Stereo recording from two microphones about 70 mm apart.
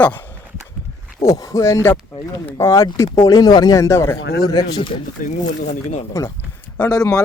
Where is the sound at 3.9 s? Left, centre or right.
Left.